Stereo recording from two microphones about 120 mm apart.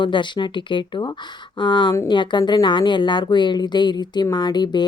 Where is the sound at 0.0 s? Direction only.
40° left (ahead or behind).